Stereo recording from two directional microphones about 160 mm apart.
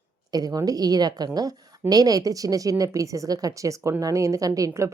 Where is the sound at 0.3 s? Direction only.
25° right (ahead or behind).